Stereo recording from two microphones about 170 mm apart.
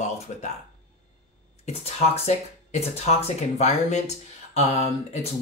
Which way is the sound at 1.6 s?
40° left (ahead or behind).